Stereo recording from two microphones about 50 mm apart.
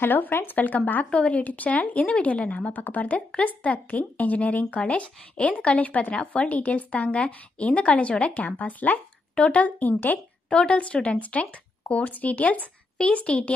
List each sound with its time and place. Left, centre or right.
0.0 s speech: left
10.5 s speech: centre